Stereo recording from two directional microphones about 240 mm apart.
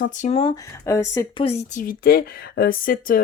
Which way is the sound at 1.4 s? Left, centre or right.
Left.